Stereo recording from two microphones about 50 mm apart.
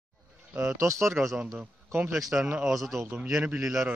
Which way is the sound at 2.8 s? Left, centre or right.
Centre.